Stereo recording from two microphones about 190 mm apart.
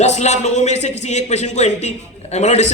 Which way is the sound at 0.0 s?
35° left (ahead or behind).